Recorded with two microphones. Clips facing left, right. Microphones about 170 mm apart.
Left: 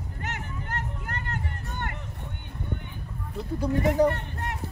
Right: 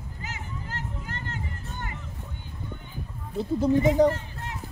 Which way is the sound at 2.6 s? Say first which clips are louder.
Left 4 dB; 65° left (ahead or behind).